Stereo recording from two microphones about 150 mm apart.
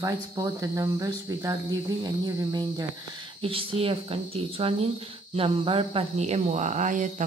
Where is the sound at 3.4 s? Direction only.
40° right (ahead or behind); by 7.1 s 55° right (ahead or behind).